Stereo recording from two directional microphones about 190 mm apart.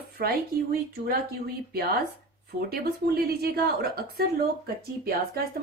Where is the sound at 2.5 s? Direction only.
55° right (ahead or behind).